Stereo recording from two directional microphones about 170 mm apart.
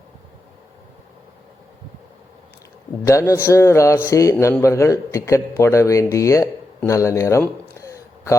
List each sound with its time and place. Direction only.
3.0 s a man's voice: 20° left (ahead or behind)